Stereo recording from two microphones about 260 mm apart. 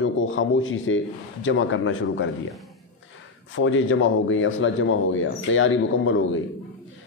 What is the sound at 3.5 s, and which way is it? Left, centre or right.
A man's voice, left.